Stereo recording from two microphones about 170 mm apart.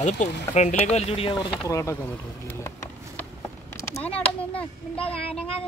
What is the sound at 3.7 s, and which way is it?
Speech, 10° left (ahead or behind).